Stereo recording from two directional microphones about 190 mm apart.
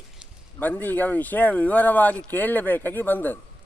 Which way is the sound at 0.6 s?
10° left (ahead or behind).